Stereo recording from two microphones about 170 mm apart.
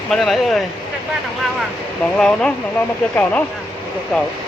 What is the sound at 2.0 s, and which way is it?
Speech, 5° left (ahead or behind).